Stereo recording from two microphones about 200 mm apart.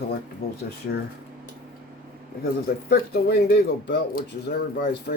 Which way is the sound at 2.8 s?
50° left (ahead or behind).